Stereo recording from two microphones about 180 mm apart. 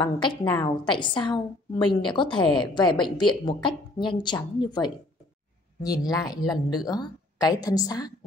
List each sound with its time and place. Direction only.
0.0 s a woman's voice: 25° left (ahead or behind)